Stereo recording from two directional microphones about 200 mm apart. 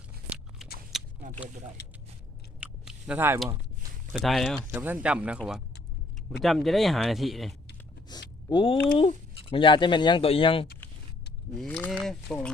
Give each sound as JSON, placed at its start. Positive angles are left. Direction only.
{"t": 0.6, "sound": "biting", "side_deg": 0}
{"t": 2.6, "sound": "a sound", "side_deg": -5}
{"t": 4.1, "sound": "speech", "side_deg": 0}
{"t": 8.1, "sound": "vehicle", "side_deg": 20}
{"t": 8.4, "sound": "speech", "side_deg": 25}
{"t": 11.5, "sound": "speech", "side_deg": 0}